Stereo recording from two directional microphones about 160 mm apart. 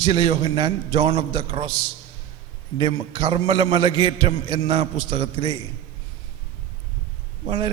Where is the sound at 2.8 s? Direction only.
30° right (ahead or behind).